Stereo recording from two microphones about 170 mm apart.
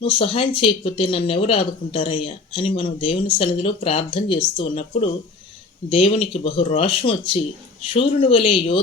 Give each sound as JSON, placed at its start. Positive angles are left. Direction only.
{"t": 0.0, "sound": "speech", "side_deg": 30}